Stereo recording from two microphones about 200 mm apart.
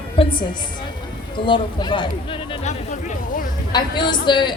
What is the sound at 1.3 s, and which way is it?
Speech, 25° left (ahead or behind).